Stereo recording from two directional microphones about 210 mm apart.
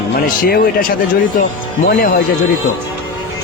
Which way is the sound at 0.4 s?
45° left (ahead or behind).